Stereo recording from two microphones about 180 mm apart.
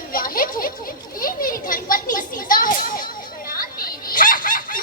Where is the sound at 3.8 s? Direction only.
55° left (ahead or behind).